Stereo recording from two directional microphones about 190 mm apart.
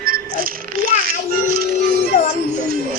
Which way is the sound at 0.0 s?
50° right (ahead or behind).